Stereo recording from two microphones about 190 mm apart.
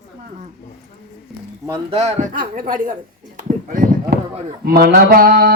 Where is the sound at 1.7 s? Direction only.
30° right (ahead or behind); by 2.9 s 45° right (ahead or behind).